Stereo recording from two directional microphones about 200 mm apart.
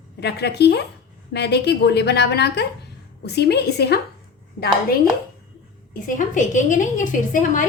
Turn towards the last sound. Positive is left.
turn(degrees=40)  # may be behind; listen again after turning